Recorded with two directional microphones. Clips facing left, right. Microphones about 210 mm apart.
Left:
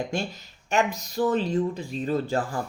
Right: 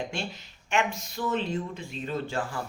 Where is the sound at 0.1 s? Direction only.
40° left (ahead or behind).